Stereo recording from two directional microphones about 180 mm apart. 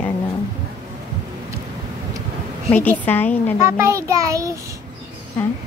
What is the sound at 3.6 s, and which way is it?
Speech, 15° right (ahead or behind).